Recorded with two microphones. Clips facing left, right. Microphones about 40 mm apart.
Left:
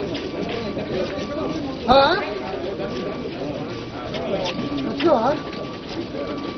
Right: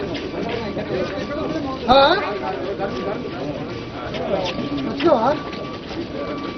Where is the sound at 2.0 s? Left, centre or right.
Right.